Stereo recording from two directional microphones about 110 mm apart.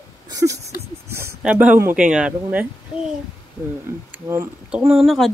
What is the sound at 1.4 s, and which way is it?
Speech, 15° right (ahead or behind).